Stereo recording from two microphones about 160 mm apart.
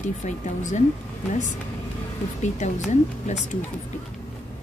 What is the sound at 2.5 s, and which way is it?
Speech, 45° left (ahead or behind).